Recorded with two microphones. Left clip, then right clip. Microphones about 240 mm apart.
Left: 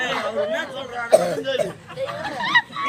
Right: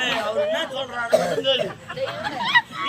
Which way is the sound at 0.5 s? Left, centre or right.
Centre.